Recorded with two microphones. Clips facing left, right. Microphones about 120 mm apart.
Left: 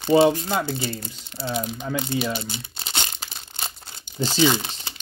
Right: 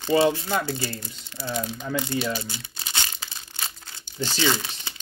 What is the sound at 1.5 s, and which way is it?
Speech, 15° left (ahead or behind).